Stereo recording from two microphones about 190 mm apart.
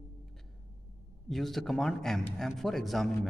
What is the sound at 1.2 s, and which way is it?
A man's voice, centre (ahead or behind).